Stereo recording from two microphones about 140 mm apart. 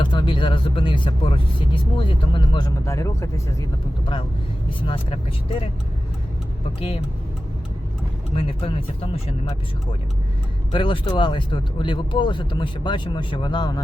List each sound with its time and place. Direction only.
0.0 s speech: 35° left (ahead or behind)
2.8 s speech: 20° left (ahead or behind)
4.8 s speech: 40° left (ahead or behind)
6.7 s speech: 45° left (ahead or behind)
10.7 s speech: 40° left (ahead or behind)